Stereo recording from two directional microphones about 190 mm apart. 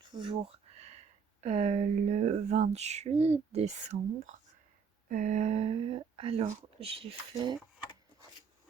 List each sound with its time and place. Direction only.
0.0 s speech: 25° right (ahead or behind)